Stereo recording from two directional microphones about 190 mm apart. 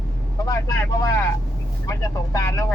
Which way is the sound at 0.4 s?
15° left (ahead or behind).